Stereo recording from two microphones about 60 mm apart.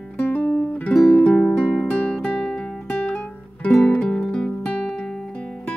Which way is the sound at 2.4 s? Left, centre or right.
Centre.